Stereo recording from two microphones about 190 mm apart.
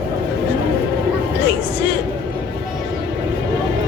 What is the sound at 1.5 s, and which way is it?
Speech, 65° left (ahead or behind).